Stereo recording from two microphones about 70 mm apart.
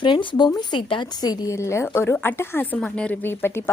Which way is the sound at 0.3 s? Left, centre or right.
Left.